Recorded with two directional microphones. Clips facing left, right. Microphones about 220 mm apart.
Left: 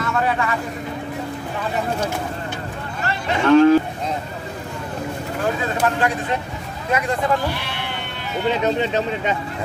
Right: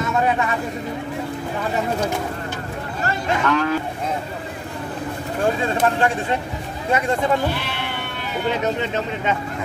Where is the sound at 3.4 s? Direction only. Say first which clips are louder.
Left 11 dB; 30° left (ahead or behind).